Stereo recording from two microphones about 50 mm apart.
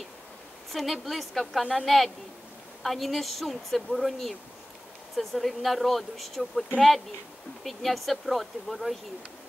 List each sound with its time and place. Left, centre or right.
0.7 s a woman's voice: centre
7.6 s speech: centre